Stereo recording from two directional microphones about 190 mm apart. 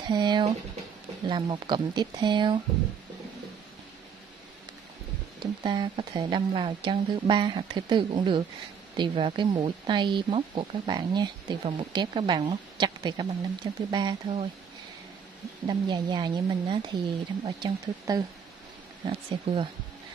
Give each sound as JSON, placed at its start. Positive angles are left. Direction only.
{"t": 0.0, "sound": "speech", "side_deg": -25}
{"t": 5.4, "sound": "speech", "side_deg": -25}
{"t": 15.6, "sound": "speech", "side_deg": -20}